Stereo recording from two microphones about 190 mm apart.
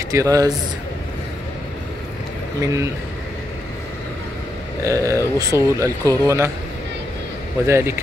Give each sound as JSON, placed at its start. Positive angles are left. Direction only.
{"t": 0.1, "sound": "speech", "side_deg": -15}
{"t": 2.6, "sound": "speech", "side_deg": -15}
{"t": 4.8, "sound": "speech", "side_deg": -15}
{"t": 7.6, "sound": "speech", "side_deg": -15}